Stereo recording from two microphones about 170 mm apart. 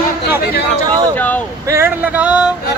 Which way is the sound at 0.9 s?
20° right (ahead or behind).